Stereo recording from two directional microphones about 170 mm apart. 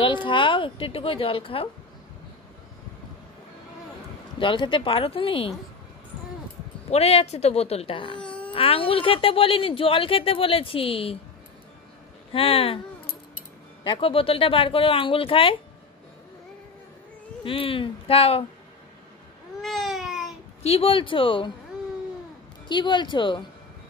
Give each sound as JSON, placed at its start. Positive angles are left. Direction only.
{"t": 0.0, "sound": "a woman's voice", "side_deg": 30}
{"t": 4.4, "sound": "a woman's voice", "side_deg": 30}
{"t": 6.9, "sound": "a woman's voice", "side_deg": 35}
{"t": 12.3, "sound": "a woman's voice", "side_deg": 35}
{"t": 13.8, "sound": "a woman's voice", "side_deg": 30}
{"t": 17.4, "sound": "a woman's voice", "side_deg": 30}
{"t": 19.6, "sound": "baby cry", "side_deg": 0}
{"t": 20.6, "sound": "a woman's voice", "side_deg": 35}
{"t": 22.7, "sound": "speech", "side_deg": 25}